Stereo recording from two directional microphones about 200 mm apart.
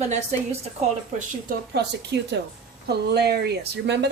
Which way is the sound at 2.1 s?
60° right (ahead or behind).